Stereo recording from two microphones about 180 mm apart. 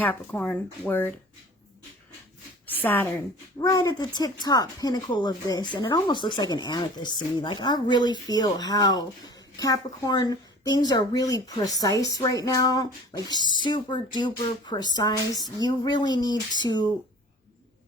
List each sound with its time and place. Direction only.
0.0 s speech: 10° left (ahead or behind)
2.8 s speech: 10° left (ahead or behind)